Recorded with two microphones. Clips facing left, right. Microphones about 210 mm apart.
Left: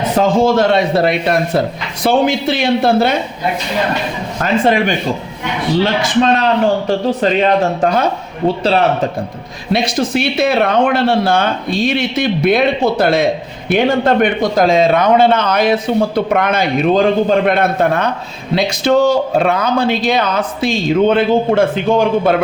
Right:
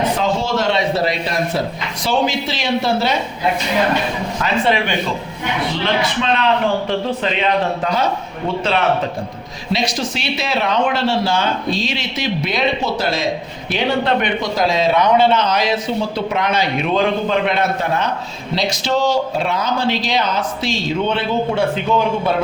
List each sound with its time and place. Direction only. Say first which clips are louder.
0.2 s a sound: left 7 dB; 50° left (ahead or behind)
2.0 s speech: left 6 dB; 55° left (ahead or behind)
4.4 s speech: left 5 dB; 50° left (ahead or behind)
6.2 s speech: left 3 dB; 40° left (ahead or behind)
9.7 s speech: left 6 dB; 55° left (ahead or behind)